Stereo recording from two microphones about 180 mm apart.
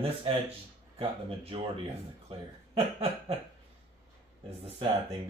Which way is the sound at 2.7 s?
35° right (ahead or behind).